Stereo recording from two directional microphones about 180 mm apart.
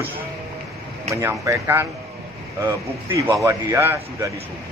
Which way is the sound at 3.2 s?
15° right (ahead or behind).